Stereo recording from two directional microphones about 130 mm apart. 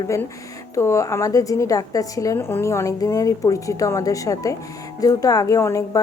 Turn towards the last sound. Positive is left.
turn(degrees=25)  # may be behind; listen again after turning